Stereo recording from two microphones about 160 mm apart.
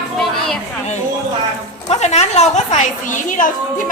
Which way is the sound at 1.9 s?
45° left (ahead or behind).